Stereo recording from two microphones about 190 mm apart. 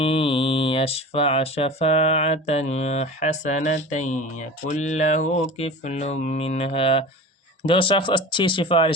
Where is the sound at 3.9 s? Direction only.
40° left (ahead or behind).